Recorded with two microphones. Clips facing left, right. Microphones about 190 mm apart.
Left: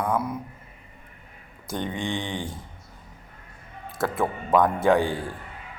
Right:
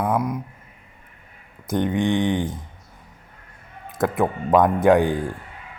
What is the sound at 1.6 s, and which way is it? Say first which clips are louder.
Speech: right 8 dB; 20° right (ahead or behind).